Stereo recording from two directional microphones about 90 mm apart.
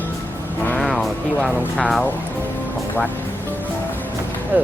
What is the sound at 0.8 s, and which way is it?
Music, 5° left (ahead or behind).